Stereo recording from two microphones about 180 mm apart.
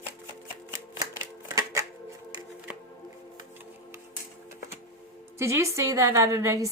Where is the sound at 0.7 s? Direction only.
15° right (ahead or behind).